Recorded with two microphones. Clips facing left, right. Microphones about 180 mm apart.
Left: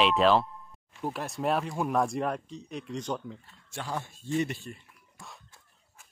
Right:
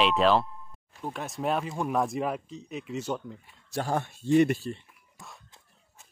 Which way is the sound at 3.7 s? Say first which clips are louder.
Right 7 dB; 45° right (ahead or behind).